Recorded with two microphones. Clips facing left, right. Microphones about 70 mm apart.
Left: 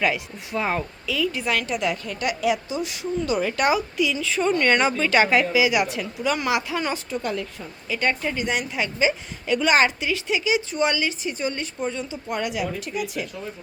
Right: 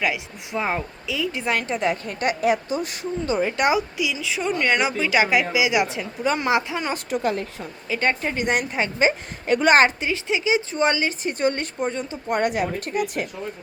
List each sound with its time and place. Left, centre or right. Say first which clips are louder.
0.0 s speech: left 1 dB; centre
3.9 s a woman's voice: left 3 dB; centre
7.1 s speech: right 3 dB; right
7.9 s speech: right 1 dB; right
8.4 s a woman's voice: right 3 dB; right
11.3 s a woman's voice: right 4 dB; right